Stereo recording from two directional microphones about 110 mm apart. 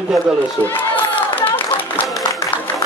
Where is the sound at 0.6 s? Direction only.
15° left (ahead or behind).